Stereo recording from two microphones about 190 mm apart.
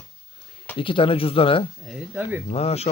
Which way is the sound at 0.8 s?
25° left (ahead or behind).